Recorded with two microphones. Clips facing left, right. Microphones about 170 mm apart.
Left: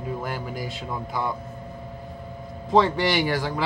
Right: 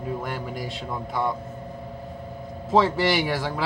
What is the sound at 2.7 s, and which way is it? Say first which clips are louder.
Speech: even; centre (ahead or behind).